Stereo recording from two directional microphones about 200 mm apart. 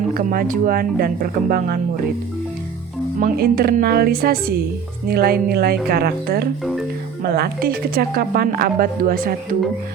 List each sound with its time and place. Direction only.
0.1 s speech: 45° right (ahead or behind)
3.2 s speech: 45° right (ahead or behind)